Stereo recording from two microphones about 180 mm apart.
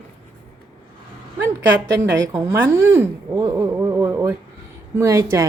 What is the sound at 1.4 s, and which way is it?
A woman's voice, 15° right (ahead or behind).